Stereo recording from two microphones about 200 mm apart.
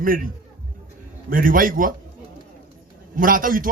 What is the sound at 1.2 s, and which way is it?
Speech, 45° right (ahead or behind).